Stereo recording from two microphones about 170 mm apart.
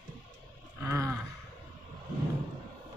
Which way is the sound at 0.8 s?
15° right (ahead or behind).